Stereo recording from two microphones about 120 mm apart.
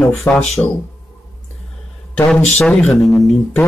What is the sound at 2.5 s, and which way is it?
Speech, 10° left (ahead or behind).